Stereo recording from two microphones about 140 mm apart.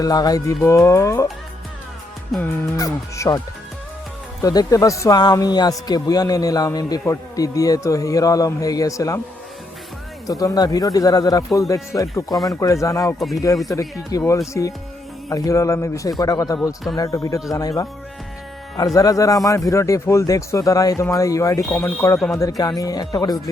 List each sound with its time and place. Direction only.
0.0 s a man's voice: 25° left (ahead or behind)
0.6 s a man's voice: 15° left (ahead or behind)
2.3 s a man's voice: centre (ahead or behind)
2.7 s a man's voice: 25° left (ahead or behind)
4.4 s a man's voice: 25° left (ahead or behind)
10.2 s a man's voice: 25° left (ahead or behind)
13.1 s a man's voice: centre (ahead or behind)
13.7 s a man's voice: 20° left (ahead or behind)
18.9 s a man's voice: 25° left (ahead or behind)